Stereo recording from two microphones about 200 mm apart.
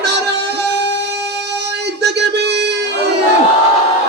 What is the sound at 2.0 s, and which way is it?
Music, 55° right (ahead or behind).